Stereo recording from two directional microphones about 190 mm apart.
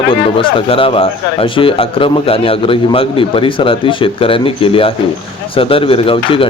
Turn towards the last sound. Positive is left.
turn(degrees=30)  # may be behind; listen again after turning